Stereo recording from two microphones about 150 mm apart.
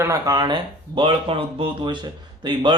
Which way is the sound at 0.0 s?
20° right (ahead or behind).